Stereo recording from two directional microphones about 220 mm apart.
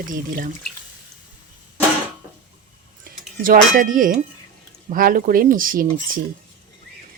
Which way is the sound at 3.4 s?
40° right (ahead or behind).